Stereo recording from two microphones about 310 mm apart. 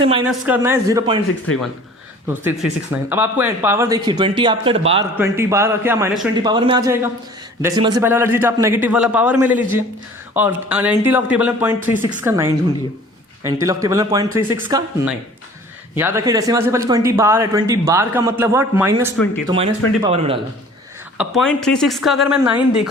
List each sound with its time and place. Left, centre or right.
0.3 s speech: centre
2.2 s speech: centre
21.2 s speech: centre